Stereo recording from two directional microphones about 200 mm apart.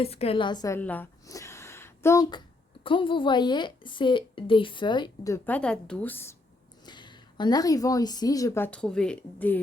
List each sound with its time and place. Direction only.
0.0 s a woman's voice: 30° left (ahead or behind); by 2.4 s 15° left (ahead or behind)
2.8 s a woman's voice: 25° left (ahead or behind); by 6.3 s 10° left (ahead or behind)
6.8 s a woman's voice: 20° left (ahead or behind); by 9.6 s 5° left (ahead or behind)